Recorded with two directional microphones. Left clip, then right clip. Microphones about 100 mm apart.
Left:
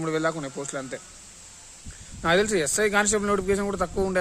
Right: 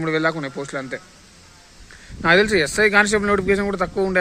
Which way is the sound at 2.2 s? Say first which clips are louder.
Right 6 dB; 35° left (ahead or behind).